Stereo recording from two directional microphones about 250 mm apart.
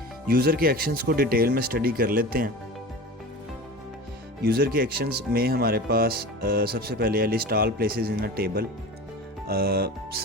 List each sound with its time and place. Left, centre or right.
0.3 s speech: right
4.4 s speech: right